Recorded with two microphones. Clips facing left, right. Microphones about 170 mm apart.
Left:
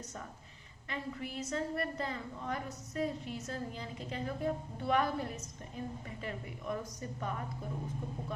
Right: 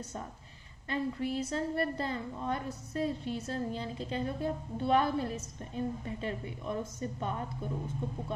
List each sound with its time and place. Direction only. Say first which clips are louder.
0.9 s a woman's voice: right 8 dB; 35° right (ahead or behind)